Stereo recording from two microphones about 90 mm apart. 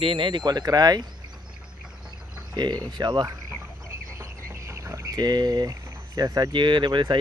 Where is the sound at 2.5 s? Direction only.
50° right (ahead or behind).